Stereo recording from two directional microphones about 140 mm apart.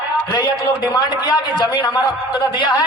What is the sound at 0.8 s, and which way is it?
A man's voice, 30° left (ahead or behind).